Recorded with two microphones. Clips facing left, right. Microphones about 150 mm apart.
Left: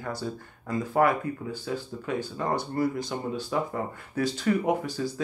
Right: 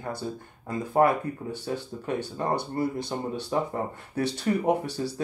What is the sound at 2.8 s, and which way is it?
Speech, 25° right (ahead or behind).